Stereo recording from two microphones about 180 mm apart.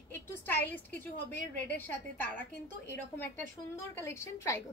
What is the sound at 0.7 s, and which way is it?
A woman's voice, 10° left (ahead or behind).